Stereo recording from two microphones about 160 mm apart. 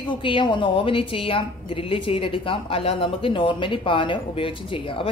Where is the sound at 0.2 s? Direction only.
30° left (ahead or behind).